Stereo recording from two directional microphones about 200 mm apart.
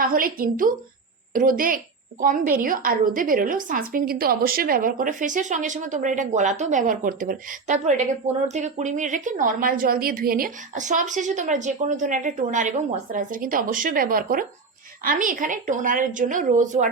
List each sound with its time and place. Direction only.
0.0 s a woman's voice: 45° right (ahead or behind)